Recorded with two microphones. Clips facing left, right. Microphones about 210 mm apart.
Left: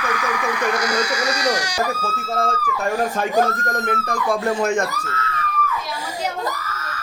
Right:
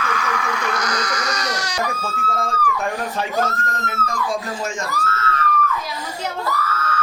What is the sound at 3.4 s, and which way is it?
Speech, 60° left (ahead or behind).